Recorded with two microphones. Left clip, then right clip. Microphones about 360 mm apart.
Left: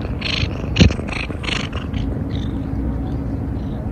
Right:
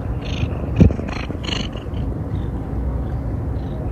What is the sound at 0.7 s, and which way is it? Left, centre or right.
Purr, right.